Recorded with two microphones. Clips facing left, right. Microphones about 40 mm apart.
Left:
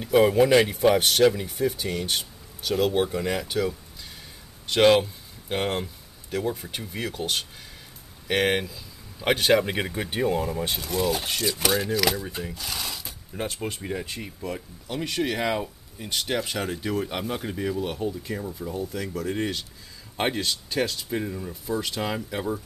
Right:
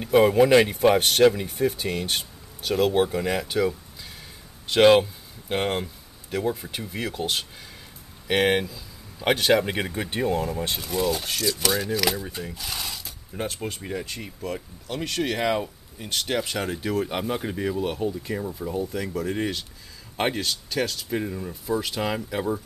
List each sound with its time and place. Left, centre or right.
0.0 s speech: centre
11.1 s mechanisms: centre
11.9 s speech: centre